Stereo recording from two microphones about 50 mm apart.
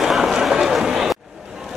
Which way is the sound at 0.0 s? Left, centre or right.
Centre.